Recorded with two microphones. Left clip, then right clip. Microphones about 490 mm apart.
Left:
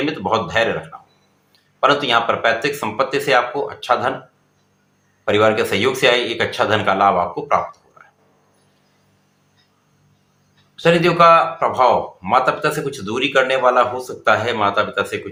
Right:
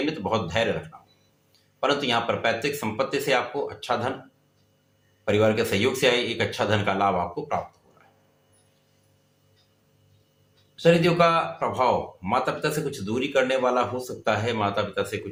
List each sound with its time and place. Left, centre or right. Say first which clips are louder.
0.0 s a man's voice: left 7 dB; right
1.8 s speech: left 8 dB; right
5.2 s speech: left 7 dB; right
10.8 s speech: left 6 dB; right